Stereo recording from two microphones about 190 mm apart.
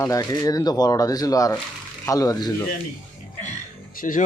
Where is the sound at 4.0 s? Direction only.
45° left (ahead or behind).